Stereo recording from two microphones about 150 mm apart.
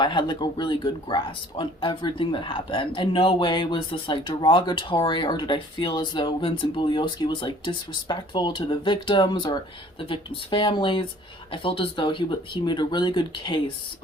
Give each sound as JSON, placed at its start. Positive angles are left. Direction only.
{"t": 0.0, "sound": "speech", "side_deg": 30}